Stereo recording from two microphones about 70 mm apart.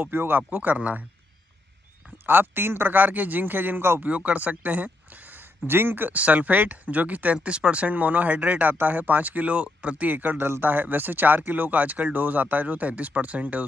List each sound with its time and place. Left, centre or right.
0.0 s speech: right
2.2 s speech: right
4.1 s speech: centre